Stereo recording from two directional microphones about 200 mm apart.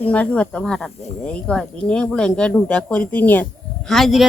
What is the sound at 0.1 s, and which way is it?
Speech, 5° left (ahead or behind).